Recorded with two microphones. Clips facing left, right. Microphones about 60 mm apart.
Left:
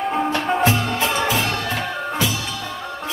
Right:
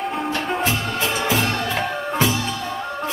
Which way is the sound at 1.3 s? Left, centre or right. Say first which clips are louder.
Right 1 dB; right.